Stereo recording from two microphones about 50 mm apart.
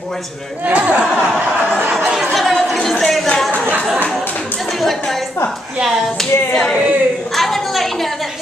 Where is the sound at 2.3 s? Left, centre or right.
Centre.